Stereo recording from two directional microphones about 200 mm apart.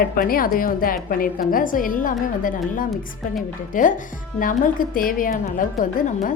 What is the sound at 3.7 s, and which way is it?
A woman's voice, 40° left (ahead or behind).